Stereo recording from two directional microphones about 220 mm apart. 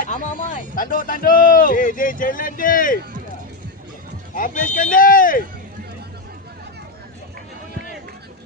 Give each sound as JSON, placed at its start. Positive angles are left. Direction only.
{"t": 0.0, "sound": "speech", "side_deg": 35}
{"t": 4.4, "sound": "speech", "side_deg": 40}